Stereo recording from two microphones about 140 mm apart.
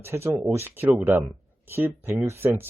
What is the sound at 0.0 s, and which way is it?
Speech, 20° right (ahead or behind).